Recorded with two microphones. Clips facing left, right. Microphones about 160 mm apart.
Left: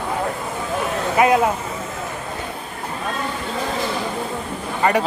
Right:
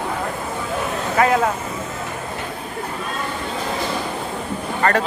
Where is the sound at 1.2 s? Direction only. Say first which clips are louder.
Left 1 dB; 20° left (ahead or behind).